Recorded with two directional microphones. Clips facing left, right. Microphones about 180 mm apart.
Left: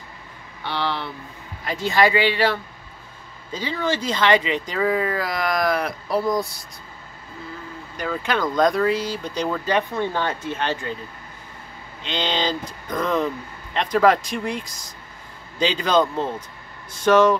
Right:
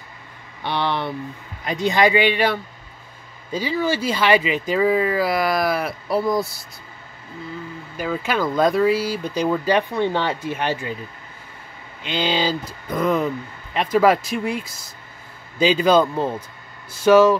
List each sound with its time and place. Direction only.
0.7 s speech: 20° right (ahead or behind)
3.5 s speech: 10° right (ahead or behind)
8.0 s speech: 5° right (ahead or behind)
12.0 s speech: 10° right (ahead or behind)